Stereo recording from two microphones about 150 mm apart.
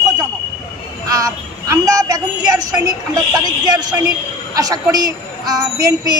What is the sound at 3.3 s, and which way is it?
A woman's voice, 25° right (ahead or behind).